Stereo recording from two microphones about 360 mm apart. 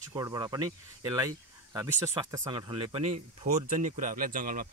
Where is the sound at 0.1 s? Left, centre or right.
Centre.